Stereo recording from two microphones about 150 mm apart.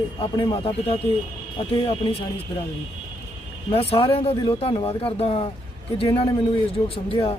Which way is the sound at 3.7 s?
40° left (ahead or behind).